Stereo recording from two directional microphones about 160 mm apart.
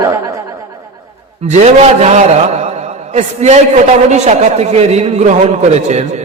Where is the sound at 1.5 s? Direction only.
45° right (ahead or behind).